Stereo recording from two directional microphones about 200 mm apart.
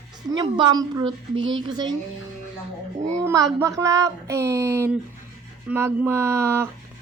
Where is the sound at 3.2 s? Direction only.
15° right (ahead or behind).